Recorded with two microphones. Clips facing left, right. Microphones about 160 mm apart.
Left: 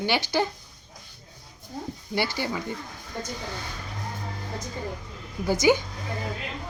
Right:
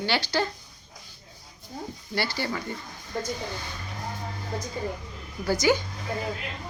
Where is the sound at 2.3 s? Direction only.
15° left (ahead or behind).